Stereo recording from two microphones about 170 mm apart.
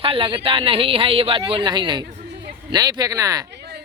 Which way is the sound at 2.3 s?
85° right.